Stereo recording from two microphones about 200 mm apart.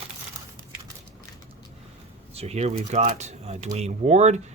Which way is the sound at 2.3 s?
30° right (ahead or behind).